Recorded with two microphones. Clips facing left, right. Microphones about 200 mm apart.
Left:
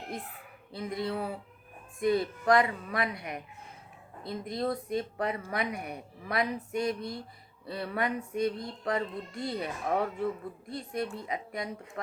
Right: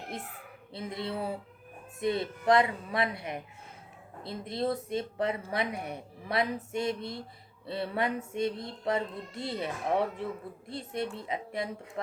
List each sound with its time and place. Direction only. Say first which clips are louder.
0.7 s speech: left 2 dB; 25° right (ahead or behind)